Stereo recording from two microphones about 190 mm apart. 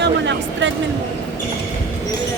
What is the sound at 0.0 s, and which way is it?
Speech, 70° right (ahead or behind).